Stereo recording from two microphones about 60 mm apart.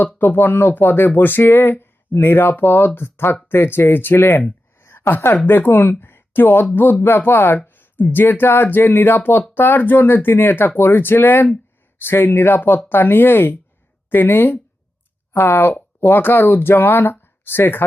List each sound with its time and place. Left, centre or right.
0.2 s speech: left
4.8 s a sound: left
5.5 s speech: left